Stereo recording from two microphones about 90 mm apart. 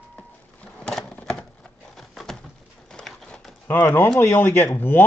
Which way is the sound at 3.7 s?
25° left (ahead or behind).